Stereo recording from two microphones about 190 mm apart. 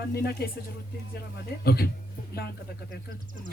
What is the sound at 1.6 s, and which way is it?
Speech, 55° left (ahead or behind).